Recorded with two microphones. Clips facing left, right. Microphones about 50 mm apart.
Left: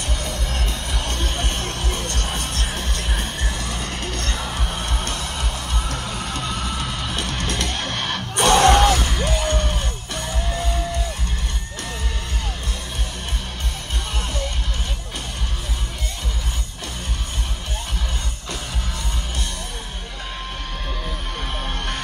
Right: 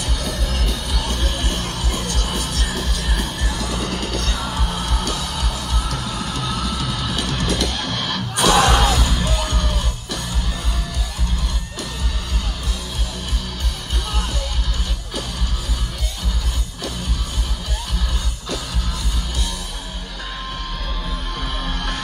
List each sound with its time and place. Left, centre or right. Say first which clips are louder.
0.2 s music: right 2 dB; left